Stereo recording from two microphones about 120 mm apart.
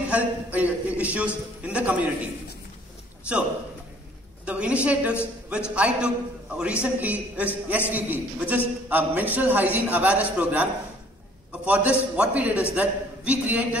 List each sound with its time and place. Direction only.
0.1 s a man's voice: 15° right (ahead or behind)
4.5 s a man's voice: 10° right (ahead or behind)